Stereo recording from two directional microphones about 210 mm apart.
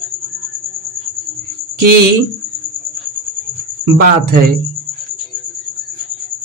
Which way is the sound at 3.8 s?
45° right (ahead or behind).